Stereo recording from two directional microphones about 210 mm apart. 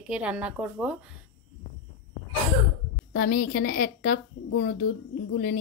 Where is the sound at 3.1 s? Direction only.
45° left (ahead or behind).